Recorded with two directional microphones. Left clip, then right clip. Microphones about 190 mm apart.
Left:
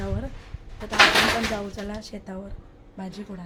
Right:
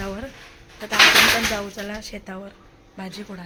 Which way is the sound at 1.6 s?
15° right (ahead or behind).